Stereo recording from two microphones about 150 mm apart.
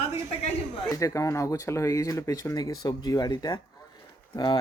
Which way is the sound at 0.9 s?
20° left (ahead or behind).